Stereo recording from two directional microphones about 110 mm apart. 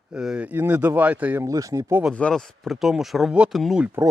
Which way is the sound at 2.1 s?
5° left (ahead or behind).